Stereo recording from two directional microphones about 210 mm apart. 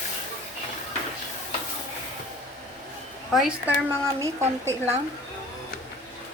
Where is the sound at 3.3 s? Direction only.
5° right (ahead or behind).